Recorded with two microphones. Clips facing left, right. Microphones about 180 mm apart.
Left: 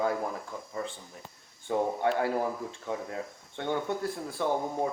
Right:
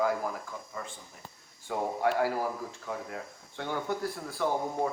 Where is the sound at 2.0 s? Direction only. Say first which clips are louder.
Even; 25° left (ahead or behind).